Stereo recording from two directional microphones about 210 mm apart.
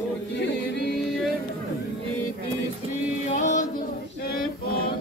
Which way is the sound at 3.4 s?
35° left (ahead or behind).